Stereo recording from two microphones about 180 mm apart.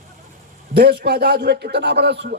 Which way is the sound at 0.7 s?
60° right (ahead or behind).